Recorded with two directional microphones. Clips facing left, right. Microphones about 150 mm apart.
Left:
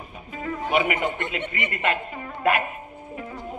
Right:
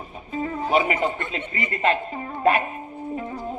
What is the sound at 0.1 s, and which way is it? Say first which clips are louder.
Music: right 4 dB; 35° right (ahead or behind).